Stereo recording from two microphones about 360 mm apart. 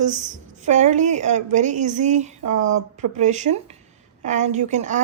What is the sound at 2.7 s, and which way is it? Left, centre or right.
Speech, right.